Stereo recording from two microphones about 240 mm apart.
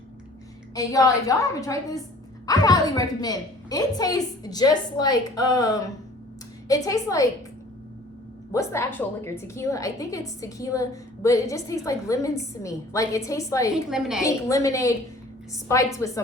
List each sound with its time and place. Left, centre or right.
0.7 s a woman's voice: centre
8.5 s a woman's voice: centre
13.9 s a woman's voice: centre
14.3 s a woman's voice: centre